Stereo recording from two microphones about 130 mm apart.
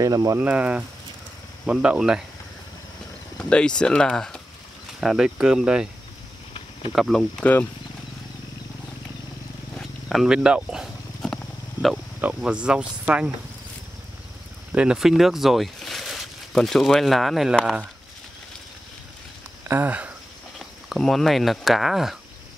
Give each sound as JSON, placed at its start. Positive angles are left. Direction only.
{"t": 0.0, "sound": "speech", "side_deg": -25}
{"t": 0.4, "sound": "speech", "side_deg": -10}
{"t": 3.3, "sound": "speech", "side_deg": 5}
{"t": 6.9, "sound": "speech", "side_deg": 0}
{"t": 9.8, "sound": "a sound", "side_deg": 0}
{"t": 12.2, "sound": "speech", "side_deg": -10}
{"t": 14.7, "sound": "speech", "side_deg": -10}
{"t": 19.7, "sound": "speech", "side_deg": -15}
{"t": 20.5, "sound": "speech", "side_deg": 0}